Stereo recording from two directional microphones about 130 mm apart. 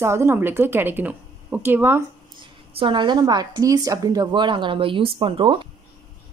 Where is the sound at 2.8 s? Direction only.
40° right (ahead or behind).